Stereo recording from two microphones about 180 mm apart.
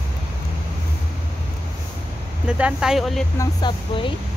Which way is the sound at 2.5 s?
5° right (ahead or behind).